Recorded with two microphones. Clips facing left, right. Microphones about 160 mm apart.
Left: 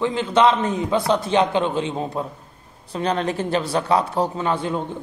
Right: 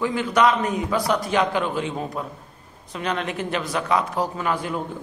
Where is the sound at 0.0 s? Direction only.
25° left (ahead or behind).